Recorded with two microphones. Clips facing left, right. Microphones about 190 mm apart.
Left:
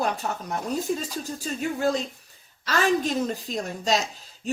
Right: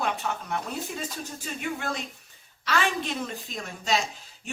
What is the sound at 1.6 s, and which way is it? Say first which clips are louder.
Speech: left 7 dB; 35° left (ahead or behind).